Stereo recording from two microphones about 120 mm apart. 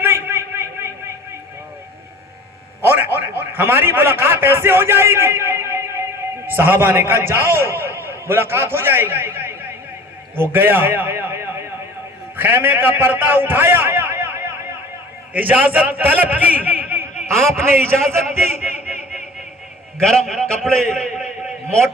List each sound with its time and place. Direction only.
0.0 s a sound: 20° right (ahead or behind)
2.8 s a man's voice: 20° right (ahead or behind)
20.0 s a man's voice: 5° left (ahead or behind)